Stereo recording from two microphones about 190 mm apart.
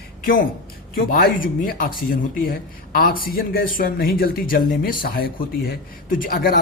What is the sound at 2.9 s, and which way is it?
Speech, 50° left (ahead or behind).